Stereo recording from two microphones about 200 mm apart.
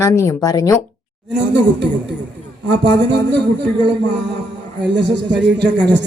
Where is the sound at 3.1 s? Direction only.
60° right (ahead or behind).